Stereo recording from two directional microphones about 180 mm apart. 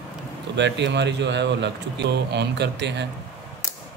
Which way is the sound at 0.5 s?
75° right (ahead or behind).